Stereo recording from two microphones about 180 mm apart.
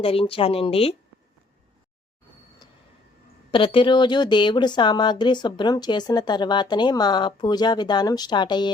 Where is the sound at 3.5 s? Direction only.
30° left (ahead or behind).